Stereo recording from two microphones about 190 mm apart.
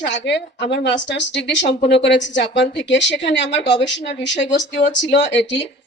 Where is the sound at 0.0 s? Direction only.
65° left (ahead or behind).